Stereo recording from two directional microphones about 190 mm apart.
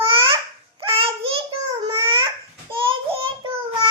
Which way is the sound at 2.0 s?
25° right (ahead or behind).